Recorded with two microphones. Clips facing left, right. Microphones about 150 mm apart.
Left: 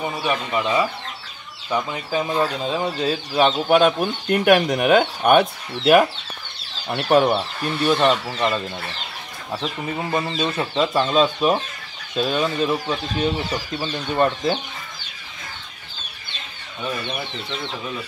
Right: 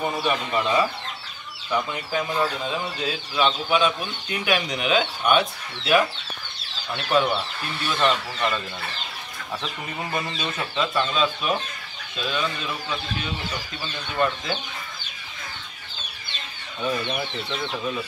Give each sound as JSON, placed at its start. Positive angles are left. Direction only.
{"t": 0.0, "sound": "speech", "side_deg": 15}
{"t": 1.7, "sound": "speech", "side_deg": 25}
{"t": 2.8, "sound": "speech", "side_deg": 40}
{"t": 7.1, "sound": "speech", "side_deg": 45}
{"t": 10.1, "sound": "speech", "side_deg": 30}